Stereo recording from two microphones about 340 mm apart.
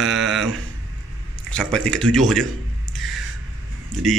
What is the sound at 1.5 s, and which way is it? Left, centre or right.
Speech, centre.